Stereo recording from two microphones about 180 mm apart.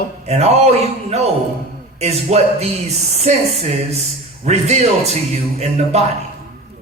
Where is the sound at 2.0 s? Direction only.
35° right (ahead or behind).